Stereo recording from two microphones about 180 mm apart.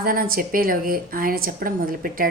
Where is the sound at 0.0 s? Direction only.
55° right (ahead or behind).